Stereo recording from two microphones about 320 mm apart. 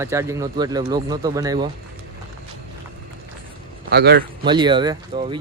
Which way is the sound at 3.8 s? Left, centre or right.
Right.